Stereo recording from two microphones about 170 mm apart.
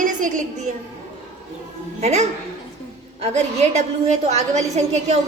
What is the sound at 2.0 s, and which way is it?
A woman's voice, 40° right (ahead or behind).